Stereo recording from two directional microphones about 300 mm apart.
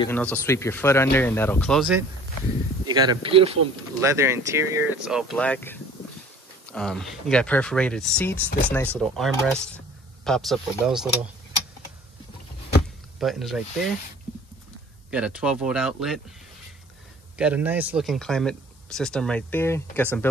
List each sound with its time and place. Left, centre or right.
0.0 s speech: centre
2.9 s speech: centre
13.2 s speech: centre
15.0 s speech: centre
17.4 s speech: centre